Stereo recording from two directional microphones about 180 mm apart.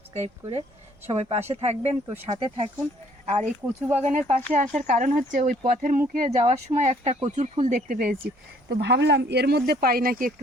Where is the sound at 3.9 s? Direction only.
40° right (ahead or behind).